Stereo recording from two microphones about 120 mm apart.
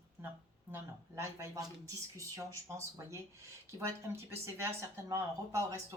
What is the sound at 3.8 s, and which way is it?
A woman's voice, 20° right (ahead or behind).